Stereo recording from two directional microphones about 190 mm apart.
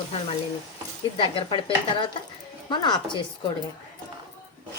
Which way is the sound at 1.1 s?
25° left (ahead or behind).